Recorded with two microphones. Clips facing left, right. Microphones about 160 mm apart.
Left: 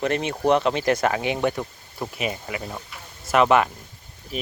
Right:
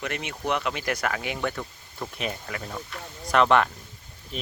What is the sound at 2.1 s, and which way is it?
Speech, 5° left (ahead or behind).